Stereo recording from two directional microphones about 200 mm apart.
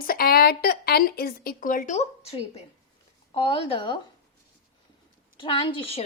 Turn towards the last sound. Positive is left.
turn(degrees=25)  # may be behind; listen again after turning